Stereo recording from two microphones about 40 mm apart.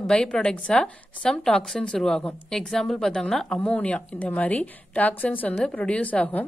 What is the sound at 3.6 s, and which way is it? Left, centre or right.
A woman's voice, left.